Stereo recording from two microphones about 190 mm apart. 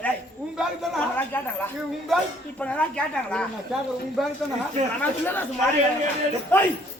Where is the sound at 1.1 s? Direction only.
10° left (ahead or behind).